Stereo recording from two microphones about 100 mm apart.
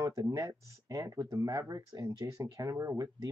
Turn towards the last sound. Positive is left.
turn(degrees=-35)  # may be behind; listen again after turning